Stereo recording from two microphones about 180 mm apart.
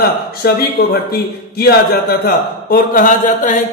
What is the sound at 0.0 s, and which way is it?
A man's voice, 60° left (ahead or behind).